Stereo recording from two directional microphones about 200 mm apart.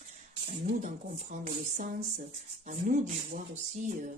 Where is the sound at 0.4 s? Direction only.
40° right (ahead or behind).